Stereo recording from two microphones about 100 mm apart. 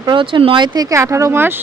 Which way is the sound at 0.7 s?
35° right (ahead or behind).